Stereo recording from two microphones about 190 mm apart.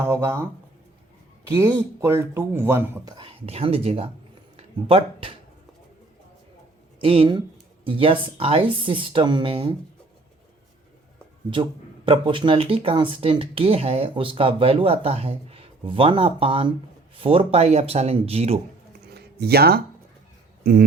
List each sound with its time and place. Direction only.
0.0 s speech: 15° right (ahead or behind)
1.5 s speech: 15° right (ahead or behind)
3.4 s speech: 30° right (ahead or behind)
7.0 s speech: 30° right (ahead or behind)
12.0 s speech: 25° right (ahead or behind)
18.9 s a sound: 55° right (ahead or behind)
20.7 s speech: 55° right (ahead or behind)